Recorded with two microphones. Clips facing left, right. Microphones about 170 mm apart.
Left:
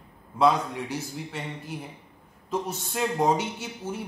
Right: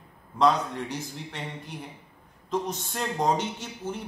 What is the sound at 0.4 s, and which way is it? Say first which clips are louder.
A man's voice: left 1 dB; 10° left (ahead or behind).